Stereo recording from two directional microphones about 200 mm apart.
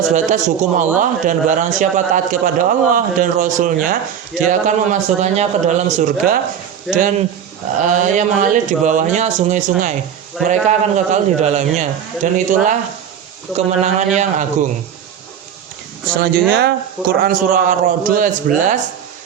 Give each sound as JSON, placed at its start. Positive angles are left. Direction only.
{"t": 0.1, "sound": "a man's voice", "side_deg": -40}
{"t": 6.9, "sound": "speech", "side_deg": 0}
{"t": 7.8, "sound": "a man's voice", "side_deg": -40}
{"t": 13.7, "sound": "a man's voice", "side_deg": -35}
{"t": 16.2, "sound": "a man's voice", "side_deg": -55}